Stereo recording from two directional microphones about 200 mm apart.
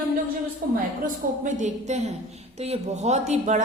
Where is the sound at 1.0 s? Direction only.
40° right (ahead or behind).